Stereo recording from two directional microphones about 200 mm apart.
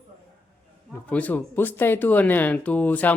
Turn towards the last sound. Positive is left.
turn(degrees=10)  # may be behind; listen again after turning